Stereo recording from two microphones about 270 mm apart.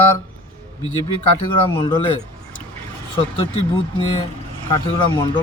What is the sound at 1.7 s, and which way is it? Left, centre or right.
Speech, centre.